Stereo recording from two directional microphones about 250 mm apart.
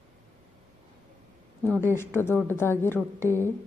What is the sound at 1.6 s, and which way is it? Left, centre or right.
Speech, centre.